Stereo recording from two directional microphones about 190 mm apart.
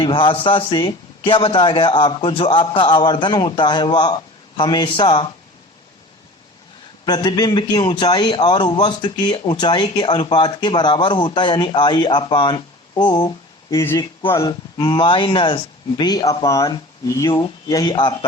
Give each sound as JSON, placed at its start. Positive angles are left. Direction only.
{"t": 0.0, "sound": "a man's voice", "side_deg": 25}
{"t": 7.0, "sound": "a man's voice", "side_deg": 25}